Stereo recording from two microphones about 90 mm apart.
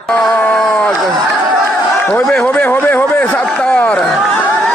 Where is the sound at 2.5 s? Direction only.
20° left (ahead or behind).